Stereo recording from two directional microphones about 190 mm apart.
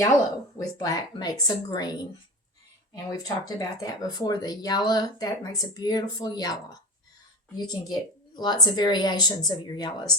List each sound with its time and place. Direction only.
0.8 s speech: 20° left (ahead or behind)
3.1 s speech: 20° left (ahead or behind)